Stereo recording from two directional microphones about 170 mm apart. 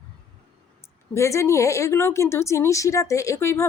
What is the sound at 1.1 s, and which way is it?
A woman's voice, 15° left (ahead or behind).